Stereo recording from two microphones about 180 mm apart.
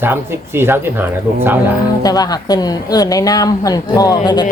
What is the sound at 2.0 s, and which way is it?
A woman's voice, 20° left (ahead or behind).